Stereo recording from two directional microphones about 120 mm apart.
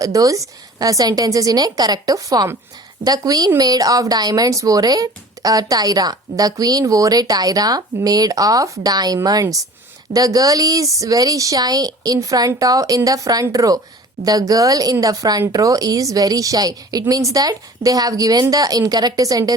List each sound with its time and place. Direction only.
0.0 s speech: 30° right (ahead or behind)